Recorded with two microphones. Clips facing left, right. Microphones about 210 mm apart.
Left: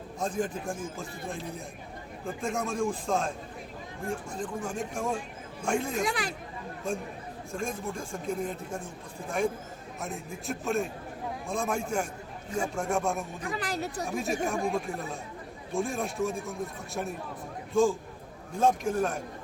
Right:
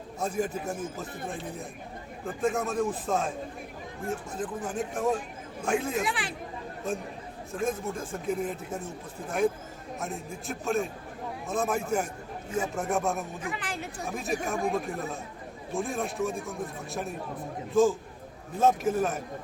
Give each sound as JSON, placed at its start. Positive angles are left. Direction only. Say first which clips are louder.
{"t": 0.2, "sound": "a man's voice", "louder": "right 1 dB", "side_deg": -10}
{"t": 4.4, "sound": "speech", "louder": "right 1 dB", "side_deg": -5}
{"t": 6.1, "sound": "speech", "louder": "left 1 dB", "side_deg": 40}
{"t": 7.5, "sound": "speech", "louder": "right 4 dB", "side_deg": -5}
{"t": 10.0, "sound": "speech", "louder": "right 1 dB", "side_deg": 0}
{"t": 13.4, "sound": "speech", "louder": "left 3 dB", "side_deg": 40}
{"t": 14.1, "sound": "speech", "louder": "even", "side_deg": 0}